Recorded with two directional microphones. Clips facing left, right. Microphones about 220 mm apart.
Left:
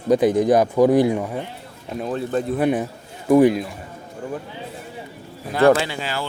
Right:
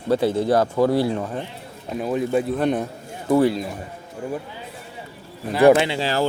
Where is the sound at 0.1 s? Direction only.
15° left (ahead or behind).